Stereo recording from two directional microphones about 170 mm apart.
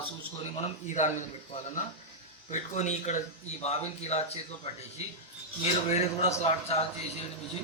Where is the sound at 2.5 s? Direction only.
45° left (ahead or behind).